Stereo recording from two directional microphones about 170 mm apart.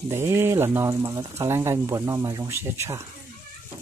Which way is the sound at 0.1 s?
15° right (ahead or behind).